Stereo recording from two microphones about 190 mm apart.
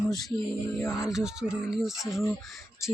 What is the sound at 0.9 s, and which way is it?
Speech, centre (ahead or behind).